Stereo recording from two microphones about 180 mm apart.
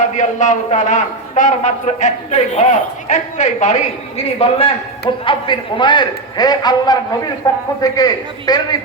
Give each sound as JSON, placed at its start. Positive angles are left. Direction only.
{"t": 0.0, "sound": "a man's voice", "side_deg": 45}